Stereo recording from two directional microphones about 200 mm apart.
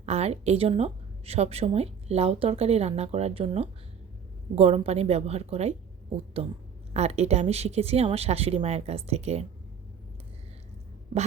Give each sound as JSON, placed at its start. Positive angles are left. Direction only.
{"t": 0.0, "sound": "a woman's voice", "side_deg": -30}